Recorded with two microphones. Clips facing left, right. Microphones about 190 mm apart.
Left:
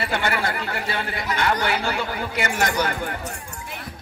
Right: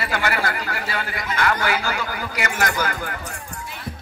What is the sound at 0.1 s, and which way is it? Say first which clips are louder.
Speech: right 2 dB; 25° left (ahead or behind).